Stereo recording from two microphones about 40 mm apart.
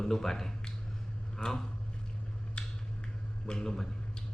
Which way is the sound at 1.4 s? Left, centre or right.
Left.